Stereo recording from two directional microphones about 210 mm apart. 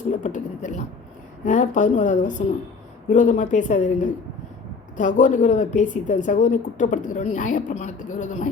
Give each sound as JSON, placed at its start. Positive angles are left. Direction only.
{"t": 0.2, "sound": "a woman's voice", "side_deg": 35}